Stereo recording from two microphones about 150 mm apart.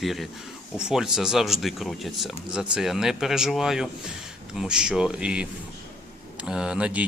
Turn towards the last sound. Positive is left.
turn(degrees=-5)  # may be behind; listen again after turning